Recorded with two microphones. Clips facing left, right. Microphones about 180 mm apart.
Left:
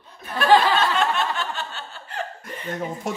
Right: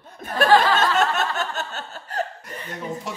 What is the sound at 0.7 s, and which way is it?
Snicker, 45° right (ahead or behind).